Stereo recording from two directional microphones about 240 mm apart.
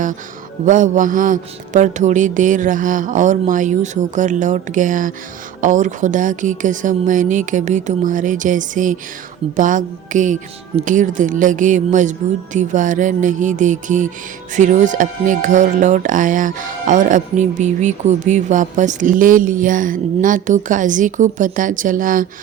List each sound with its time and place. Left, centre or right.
0.6 s speech: right